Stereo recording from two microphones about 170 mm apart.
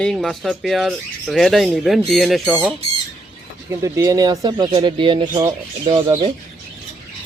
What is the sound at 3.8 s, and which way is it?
Speech, 20° right (ahead or behind).